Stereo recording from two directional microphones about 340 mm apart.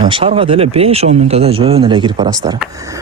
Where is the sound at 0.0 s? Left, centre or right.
Centre.